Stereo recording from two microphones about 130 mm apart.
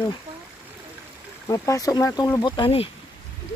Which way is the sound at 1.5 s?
25° left (ahead or behind).